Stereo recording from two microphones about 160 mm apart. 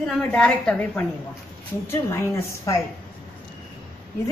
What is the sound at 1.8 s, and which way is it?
Speech, 15° left (ahead or behind).